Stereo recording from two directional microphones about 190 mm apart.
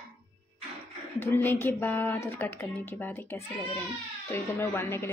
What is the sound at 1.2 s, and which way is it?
Speech, 10° left (ahead or behind).